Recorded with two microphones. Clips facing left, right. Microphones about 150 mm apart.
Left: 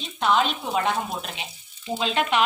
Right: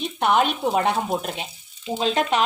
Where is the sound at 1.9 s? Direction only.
40° right (ahead or behind).